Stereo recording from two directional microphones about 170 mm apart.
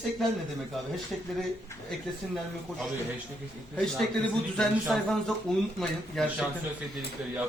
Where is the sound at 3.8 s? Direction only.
Centre (ahead or behind).